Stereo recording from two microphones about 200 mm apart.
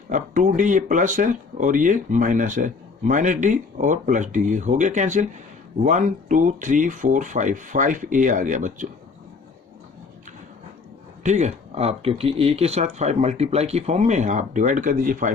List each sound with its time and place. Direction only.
0.1 s speech: 40° right (ahead or behind)
11.2 s speech: 35° right (ahead or behind)